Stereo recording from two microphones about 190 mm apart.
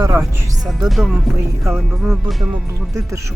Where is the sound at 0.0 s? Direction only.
15° right (ahead or behind).